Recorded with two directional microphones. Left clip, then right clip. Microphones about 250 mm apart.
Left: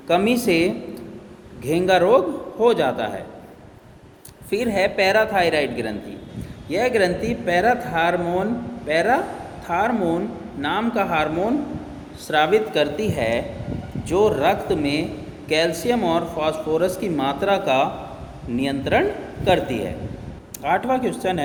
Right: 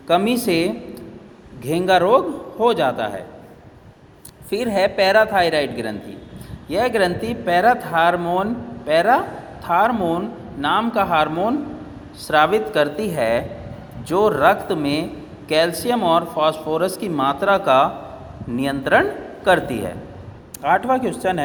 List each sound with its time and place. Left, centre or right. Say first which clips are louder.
0.1 s speech: right 1 dB; centre
4.4 s speech: right 2 dB; centre